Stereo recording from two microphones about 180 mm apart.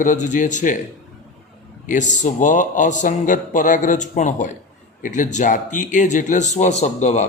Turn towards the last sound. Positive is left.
turn(degrees=40)  # may be behind; listen again after turning